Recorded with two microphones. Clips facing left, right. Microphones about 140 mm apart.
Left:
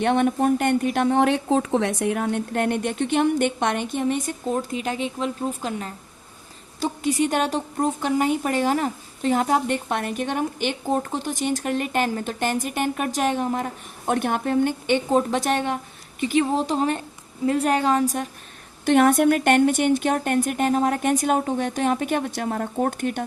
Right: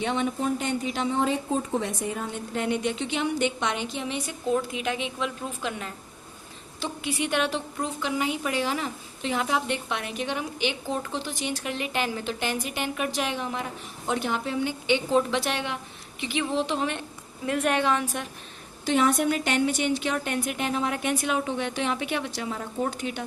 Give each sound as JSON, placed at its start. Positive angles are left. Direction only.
{"t": 0.0, "sound": "a woman's voice", "side_deg": 55}
{"t": 18.9, "sound": "a woman's voice", "side_deg": 55}